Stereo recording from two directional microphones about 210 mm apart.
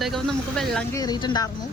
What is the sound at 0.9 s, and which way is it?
Speech, 20° left (ahead or behind).